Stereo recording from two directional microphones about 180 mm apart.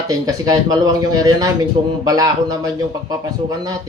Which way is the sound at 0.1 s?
20° right (ahead or behind).